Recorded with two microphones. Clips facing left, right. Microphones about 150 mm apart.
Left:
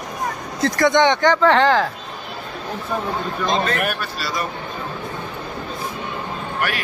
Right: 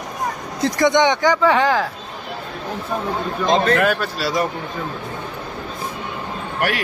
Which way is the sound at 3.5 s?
90° right.